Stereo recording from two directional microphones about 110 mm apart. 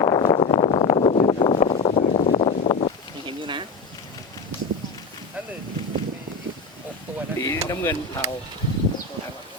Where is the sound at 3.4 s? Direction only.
45° right (ahead or behind).